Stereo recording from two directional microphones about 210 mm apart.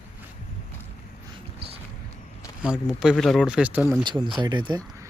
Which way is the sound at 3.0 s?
Centre (ahead or behind).